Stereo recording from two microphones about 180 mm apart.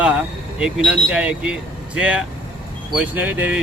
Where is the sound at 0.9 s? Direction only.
5° right (ahead or behind).